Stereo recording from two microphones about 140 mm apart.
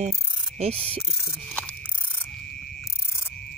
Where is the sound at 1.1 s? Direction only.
10° left (ahead or behind).